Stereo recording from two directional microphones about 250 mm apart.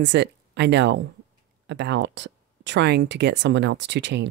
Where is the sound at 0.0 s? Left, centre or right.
Right.